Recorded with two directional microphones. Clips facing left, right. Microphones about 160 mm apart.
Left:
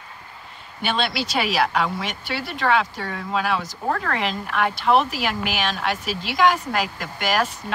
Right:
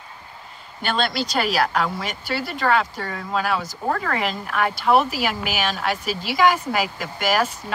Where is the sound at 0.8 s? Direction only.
Centre (ahead or behind).